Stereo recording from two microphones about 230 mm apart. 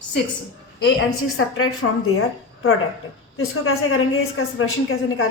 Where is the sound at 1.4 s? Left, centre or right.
Left.